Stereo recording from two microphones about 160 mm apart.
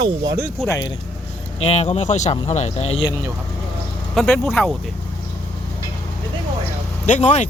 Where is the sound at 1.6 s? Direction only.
40° left (ahead or behind).